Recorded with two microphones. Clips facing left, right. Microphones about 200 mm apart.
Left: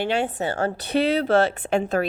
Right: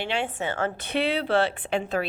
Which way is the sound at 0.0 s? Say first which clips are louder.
Left 5 dB; 40° left (ahead or behind).